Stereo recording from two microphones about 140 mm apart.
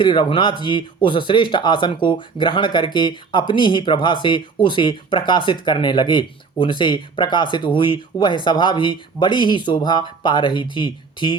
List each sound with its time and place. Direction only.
0.0 s speech: 35° left (ahead or behind)